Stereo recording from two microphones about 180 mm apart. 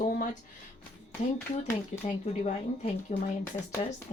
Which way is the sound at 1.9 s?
40° left (ahead or behind).